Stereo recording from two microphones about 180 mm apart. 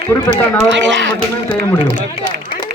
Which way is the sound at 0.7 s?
90° right.